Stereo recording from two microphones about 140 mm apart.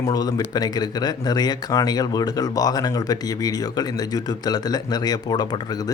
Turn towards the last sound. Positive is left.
turn(degrees=30)  # may be behind; listen again after turning